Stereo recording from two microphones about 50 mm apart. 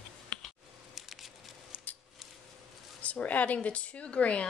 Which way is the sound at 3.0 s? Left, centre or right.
Left.